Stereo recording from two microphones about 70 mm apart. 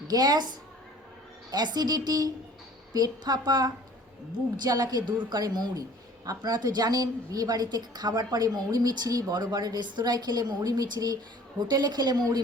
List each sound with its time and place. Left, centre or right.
0.1 s a woman's voice: right
11.7 s a woman's voice: right